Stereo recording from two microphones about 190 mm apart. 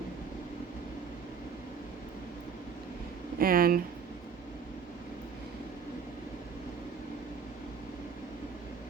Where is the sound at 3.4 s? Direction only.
50° right (ahead or behind).